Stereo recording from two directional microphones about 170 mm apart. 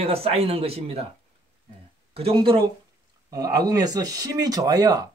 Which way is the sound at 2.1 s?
35° right (ahead or behind).